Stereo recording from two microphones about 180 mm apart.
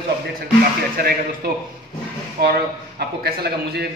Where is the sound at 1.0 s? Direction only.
55° right (ahead or behind).